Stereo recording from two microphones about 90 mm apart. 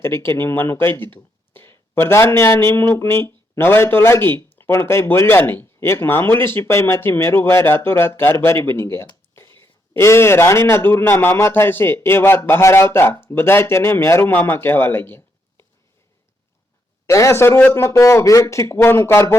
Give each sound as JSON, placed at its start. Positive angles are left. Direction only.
{"t": 0.0, "sound": "speech", "side_deg": 25}
{"t": 17.1, "sound": "speech", "side_deg": 35}